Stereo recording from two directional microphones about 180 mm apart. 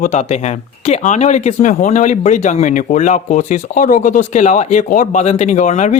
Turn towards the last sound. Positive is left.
turn(degrees=40)  # may be behind; listen again after turning